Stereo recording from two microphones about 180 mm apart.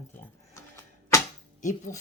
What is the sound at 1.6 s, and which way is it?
Speech, 45° left (ahead or behind).